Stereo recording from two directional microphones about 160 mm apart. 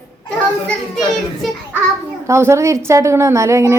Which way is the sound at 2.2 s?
15° right (ahead or behind).